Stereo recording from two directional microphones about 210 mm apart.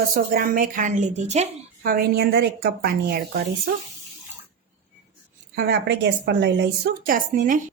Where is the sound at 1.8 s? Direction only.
45° right (ahead or behind).